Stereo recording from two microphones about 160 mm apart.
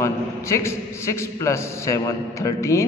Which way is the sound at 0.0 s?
15° left (ahead or behind).